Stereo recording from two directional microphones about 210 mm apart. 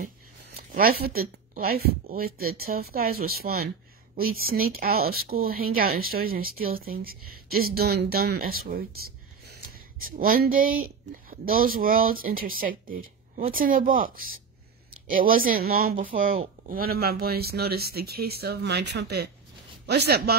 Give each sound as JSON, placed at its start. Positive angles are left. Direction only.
{"t": 0.7, "sound": "speech", "side_deg": -45}